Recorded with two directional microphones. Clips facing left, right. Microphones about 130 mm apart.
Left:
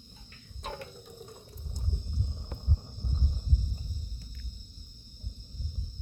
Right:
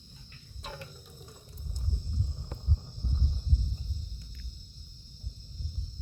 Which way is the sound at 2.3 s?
20° left (ahead or behind).